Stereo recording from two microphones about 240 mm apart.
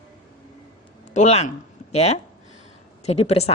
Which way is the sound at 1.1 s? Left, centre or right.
Left.